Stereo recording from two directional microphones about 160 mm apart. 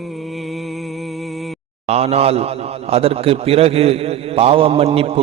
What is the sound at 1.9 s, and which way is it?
A man's voice, 40° right (ahead or behind).